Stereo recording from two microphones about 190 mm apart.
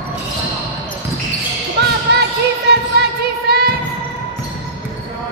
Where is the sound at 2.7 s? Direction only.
60° right (ahead or behind).